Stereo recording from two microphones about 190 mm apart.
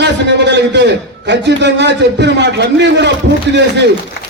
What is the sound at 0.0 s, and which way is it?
A man's voice, 65° right (ahead or behind).